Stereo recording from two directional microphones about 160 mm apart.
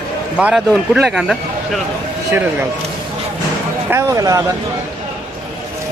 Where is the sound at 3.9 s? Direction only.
20° right (ahead or behind).